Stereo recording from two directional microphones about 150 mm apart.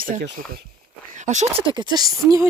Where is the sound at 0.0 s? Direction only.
70° right (ahead or behind).